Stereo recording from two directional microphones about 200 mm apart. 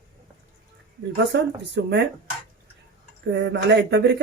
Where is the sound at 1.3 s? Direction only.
60° right (ahead or behind).